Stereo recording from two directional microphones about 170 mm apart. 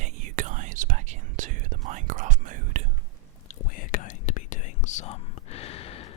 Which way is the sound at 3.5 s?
50° left (ahead or behind).